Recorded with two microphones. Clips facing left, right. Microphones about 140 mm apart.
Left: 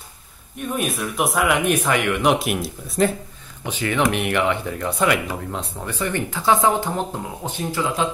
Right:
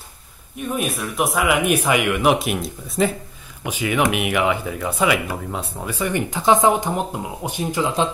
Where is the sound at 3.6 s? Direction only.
10° right (ahead or behind).